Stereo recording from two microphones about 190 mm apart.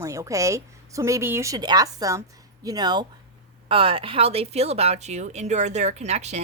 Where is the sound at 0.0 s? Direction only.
15° right (ahead or behind).